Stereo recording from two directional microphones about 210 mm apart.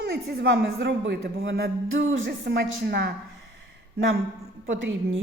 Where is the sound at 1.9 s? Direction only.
70° right (ahead or behind).